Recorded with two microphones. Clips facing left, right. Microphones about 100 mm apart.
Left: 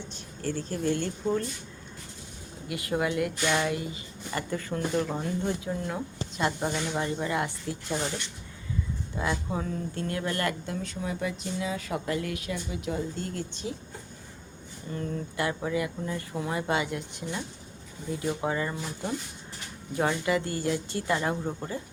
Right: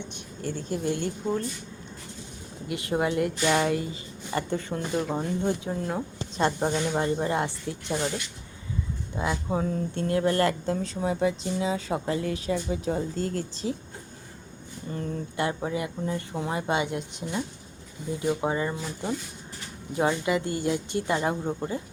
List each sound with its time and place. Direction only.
0.4 s speech: 20° right (ahead or behind)
2.6 s speech: 25° right (ahead or behind)
4.9 s speech: 10° right (ahead or behind)
5.4 s speech: 25° right (ahead or behind)
9.2 s speech: 20° right (ahead or behind)
14.9 s speech: 25° right (ahead or behind)